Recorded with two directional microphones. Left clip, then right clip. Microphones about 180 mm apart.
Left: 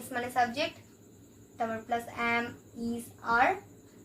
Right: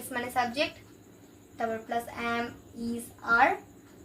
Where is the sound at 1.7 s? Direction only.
10° left (ahead or behind).